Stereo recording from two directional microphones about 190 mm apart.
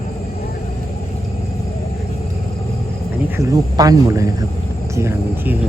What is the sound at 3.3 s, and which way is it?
Speech, 20° right (ahead or behind).